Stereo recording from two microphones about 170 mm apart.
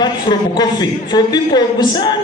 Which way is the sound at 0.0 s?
25° left (ahead or behind).